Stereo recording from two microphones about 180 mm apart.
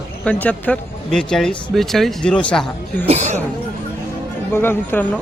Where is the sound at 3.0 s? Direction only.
40° right (ahead or behind).